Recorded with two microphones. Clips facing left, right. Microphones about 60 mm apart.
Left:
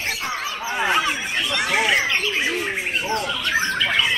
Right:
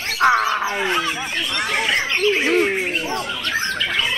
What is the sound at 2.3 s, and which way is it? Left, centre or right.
Bird, right.